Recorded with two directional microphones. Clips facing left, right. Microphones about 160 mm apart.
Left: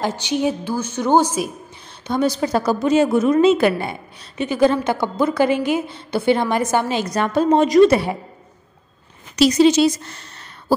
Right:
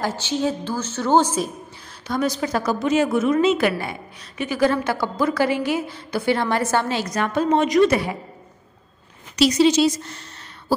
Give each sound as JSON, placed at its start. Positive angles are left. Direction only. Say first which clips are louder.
{"t": 0.0, "sound": "a woman's voice", "louder": "left 3 dB", "side_deg": 15}
{"t": 2.0, "sound": "a woman's voice", "louder": "left 3 dB", "side_deg": 30}
{"t": 7.1, "sound": "a woman's voice", "louder": "left 5 dB", "side_deg": 35}
{"t": 9.4, "sound": "speech", "louder": "left 3 dB", "side_deg": 50}